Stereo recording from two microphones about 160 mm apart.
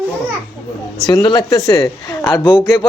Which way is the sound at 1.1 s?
25° left (ahead or behind).